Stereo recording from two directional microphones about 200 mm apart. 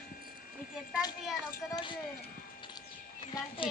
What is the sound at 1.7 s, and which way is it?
Speech, 25° left (ahead or behind).